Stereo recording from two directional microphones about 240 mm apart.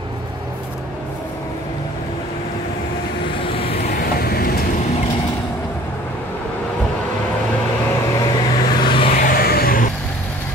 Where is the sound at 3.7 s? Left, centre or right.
Left.